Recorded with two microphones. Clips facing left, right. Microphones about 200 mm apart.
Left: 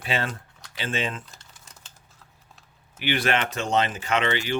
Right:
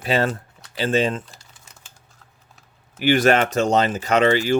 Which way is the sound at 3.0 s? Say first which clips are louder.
Right 8 dB; 45° right (ahead or behind).